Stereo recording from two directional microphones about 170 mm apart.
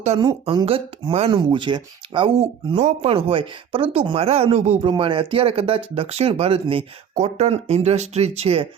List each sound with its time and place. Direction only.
0.1 s speech: 35° right (ahead or behind)